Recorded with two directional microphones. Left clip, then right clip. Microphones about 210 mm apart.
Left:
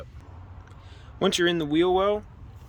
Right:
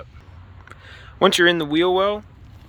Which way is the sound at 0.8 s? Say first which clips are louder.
Right 9 dB; 5° left (ahead or behind).